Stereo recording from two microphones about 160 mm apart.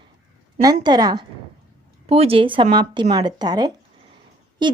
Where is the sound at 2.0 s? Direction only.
35° right (ahead or behind).